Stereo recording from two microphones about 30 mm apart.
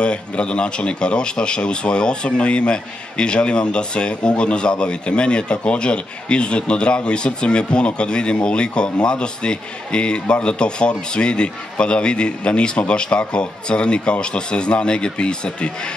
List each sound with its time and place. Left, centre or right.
0.0 s speech: left